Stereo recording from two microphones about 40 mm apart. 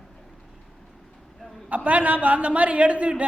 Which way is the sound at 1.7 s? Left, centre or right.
Right.